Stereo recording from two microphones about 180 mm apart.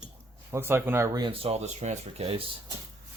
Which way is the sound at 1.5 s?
40° right (ahead or behind).